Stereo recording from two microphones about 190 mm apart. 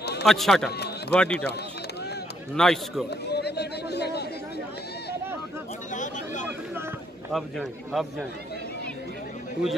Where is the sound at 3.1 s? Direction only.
60° left (ahead or behind).